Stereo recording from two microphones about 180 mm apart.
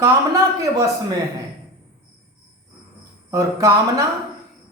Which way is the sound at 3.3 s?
20° right (ahead or behind).